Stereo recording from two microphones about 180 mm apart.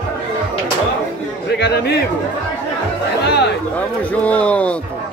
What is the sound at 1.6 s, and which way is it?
Speech, 65° left (ahead or behind).